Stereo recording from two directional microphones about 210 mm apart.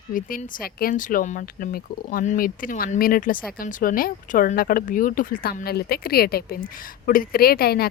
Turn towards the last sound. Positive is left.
turn(degrees=45)  # may be behind; listen again after turning